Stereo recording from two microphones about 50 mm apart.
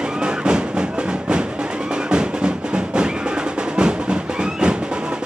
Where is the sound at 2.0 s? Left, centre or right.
Centre.